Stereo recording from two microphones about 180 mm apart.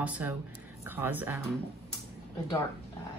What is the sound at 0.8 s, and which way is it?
Speech, 10° right (ahead or behind).